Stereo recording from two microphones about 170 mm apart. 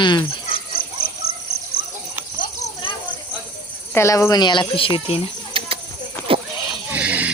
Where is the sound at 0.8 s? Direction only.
60° left (ahead or behind).